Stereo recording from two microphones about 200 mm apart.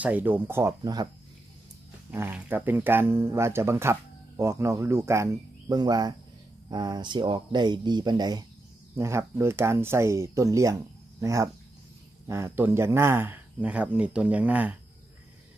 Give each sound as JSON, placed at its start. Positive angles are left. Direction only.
{"t": 0.0, "sound": "speech", "side_deg": -10}
{"t": 2.0, "sound": "speech", "side_deg": -10}